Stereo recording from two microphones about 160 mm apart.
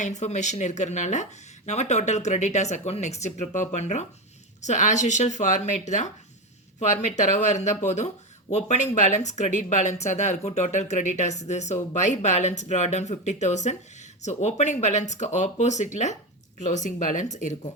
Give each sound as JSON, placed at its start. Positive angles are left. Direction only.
{"t": 0.0, "sound": "speech", "side_deg": 45}